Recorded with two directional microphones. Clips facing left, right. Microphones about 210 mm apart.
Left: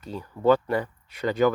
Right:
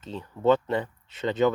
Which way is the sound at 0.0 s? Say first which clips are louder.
Left 1 dB; 25° right (ahead or behind).